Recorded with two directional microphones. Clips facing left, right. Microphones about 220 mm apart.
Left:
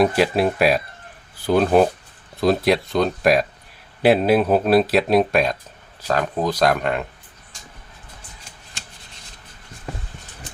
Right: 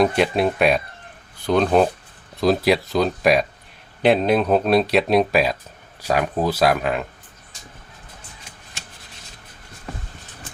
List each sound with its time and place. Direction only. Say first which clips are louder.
0.0 s speech: left 1 dB; 5° left (ahead or behind)